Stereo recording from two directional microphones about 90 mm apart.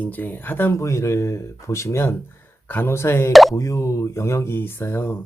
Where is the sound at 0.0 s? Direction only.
20° left (ahead or behind).